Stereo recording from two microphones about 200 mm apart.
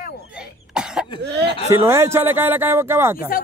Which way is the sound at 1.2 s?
55° right (ahead or behind).